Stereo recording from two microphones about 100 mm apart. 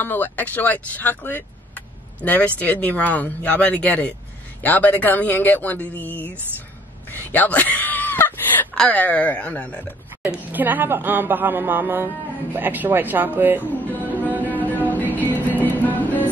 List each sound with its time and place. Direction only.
0.0 s speech: 20° left (ahead or behind)
7.1 s a sound: 20° left (ahead or behind)
8.7 s speech: 15° left (ahead or behind)
10.2 s speech: 20° right (ahead or behind)
14.5 s music: 15° left (ahead or behind)